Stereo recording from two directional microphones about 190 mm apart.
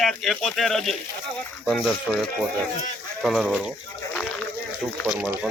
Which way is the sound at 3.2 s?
Centre (ahead or behind).